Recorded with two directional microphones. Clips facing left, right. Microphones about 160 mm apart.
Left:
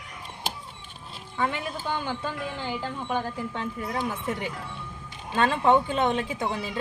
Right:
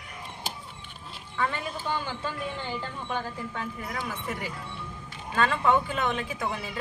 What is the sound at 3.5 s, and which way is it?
A woman's voice, 25° left (ahead or behind).